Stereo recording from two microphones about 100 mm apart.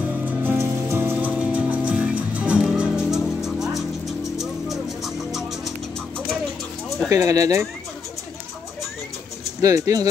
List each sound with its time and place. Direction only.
0.2 s music: 20° right (ahead or behind); by 5.4 s centre (ahead or behind)
7.1 s speech: 30° right (ahead or behind)
9.6 s speech: 35° right (ahead or behind)